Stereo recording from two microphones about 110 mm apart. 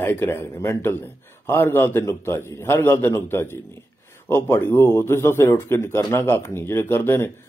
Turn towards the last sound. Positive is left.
turn(degrees=20)  # may be behind; listen again after turning